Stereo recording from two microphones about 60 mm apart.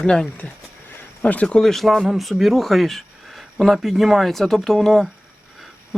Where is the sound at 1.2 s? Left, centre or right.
Left.